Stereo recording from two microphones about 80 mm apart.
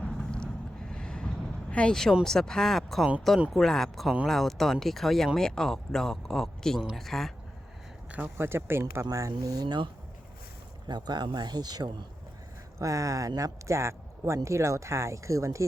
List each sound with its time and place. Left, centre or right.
0.0 s vehicle: centre
0.9 s a sound: centre
1.7 s speech: centre
8.4 s speech: right
9.0 s speech: right
12.8 s speech: right